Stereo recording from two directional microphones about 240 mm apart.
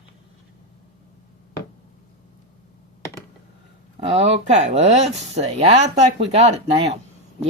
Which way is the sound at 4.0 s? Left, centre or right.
Right.